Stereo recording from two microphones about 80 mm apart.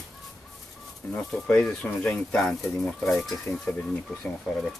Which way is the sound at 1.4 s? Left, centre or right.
Centre.